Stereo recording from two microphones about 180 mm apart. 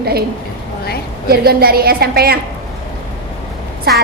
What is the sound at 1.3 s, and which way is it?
A woman's voice, 60° right (ahead or behind).